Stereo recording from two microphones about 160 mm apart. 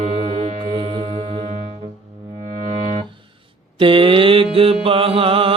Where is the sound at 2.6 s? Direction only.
45° right (ahead or behind).